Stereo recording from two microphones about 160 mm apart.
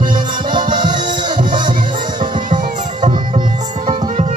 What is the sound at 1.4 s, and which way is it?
Music, 55° right (ahead or behind).